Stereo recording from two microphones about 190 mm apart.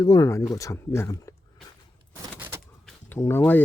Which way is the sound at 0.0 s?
20° left (ahead or behind).